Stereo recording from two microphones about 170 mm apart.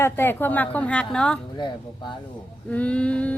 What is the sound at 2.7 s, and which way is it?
Speech, 10° left (ahead or behind).